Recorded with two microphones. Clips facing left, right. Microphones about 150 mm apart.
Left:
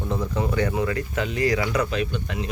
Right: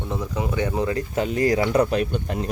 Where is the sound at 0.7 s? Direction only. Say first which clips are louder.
Right 1 dB; 25° right (ahead or behind).